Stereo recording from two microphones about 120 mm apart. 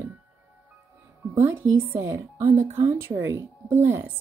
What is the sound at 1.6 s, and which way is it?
A woman's voice, 15° right (ahead or behind).